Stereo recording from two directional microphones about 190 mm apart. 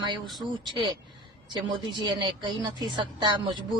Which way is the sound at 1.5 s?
25° right (ahead or behind).